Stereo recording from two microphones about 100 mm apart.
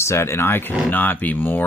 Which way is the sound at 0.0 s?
25° left (ahead or behind).